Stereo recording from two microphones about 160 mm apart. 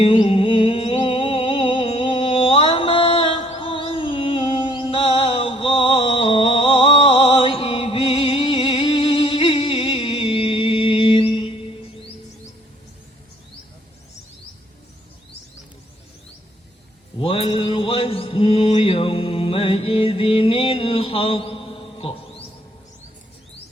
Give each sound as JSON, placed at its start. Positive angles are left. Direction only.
{"t": 0.0, "sound": "music", "side_deg": 35}
{"t": 17.2, "sound": "mantra", "side_deg": 35}